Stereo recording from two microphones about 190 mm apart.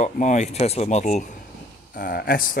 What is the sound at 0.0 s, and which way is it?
Speech, 40° left (ahead or behind).